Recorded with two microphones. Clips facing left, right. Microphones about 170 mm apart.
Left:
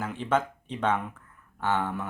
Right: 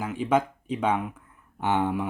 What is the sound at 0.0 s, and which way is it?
Speech, 10° right (ahead or behind).